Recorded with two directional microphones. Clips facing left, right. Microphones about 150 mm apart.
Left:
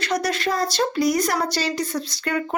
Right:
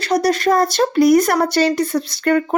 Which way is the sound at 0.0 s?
35° right (ahead or behind).